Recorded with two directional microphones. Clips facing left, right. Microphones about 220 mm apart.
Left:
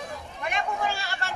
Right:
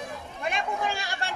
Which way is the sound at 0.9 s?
15° right (ahead or behind).